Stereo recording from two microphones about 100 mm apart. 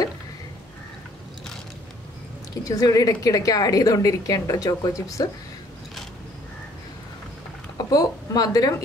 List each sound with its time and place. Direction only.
2.7 s a woman's voice: 35° left (ahead or behind)
7.7 s a woman's voice: 40° left (ahead or behind)